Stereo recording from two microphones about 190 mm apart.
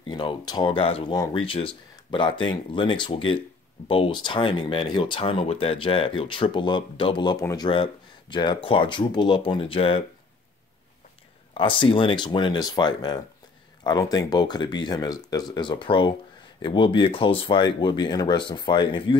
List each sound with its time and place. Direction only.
0.0 s speech: 25° left (ahead or behind)
11.5 s speech: 25° left (ahead or behind)